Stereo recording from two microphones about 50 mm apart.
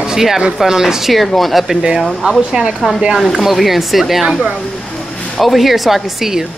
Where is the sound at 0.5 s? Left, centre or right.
Centre.